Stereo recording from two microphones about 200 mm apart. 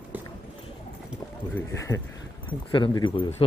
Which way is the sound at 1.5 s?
15° left (ahead or behind).